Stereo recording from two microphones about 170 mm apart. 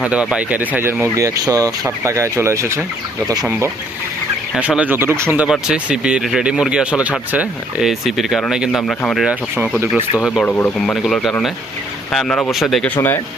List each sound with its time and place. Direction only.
0.0 s speech: 5° right (ahead or behind)
4.5 s speech: 5° right (ahead or behind)
9.2 s speech: 5° right (ahead or behind)